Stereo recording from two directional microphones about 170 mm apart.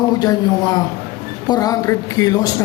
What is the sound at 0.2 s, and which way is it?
Speech, 20° left (ahead or behind).